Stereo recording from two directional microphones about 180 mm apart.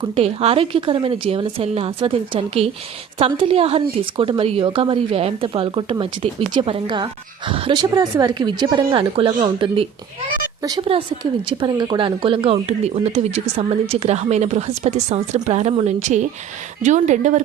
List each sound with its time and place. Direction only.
0.0 s a woman's voice: 35° right (ahead or behind)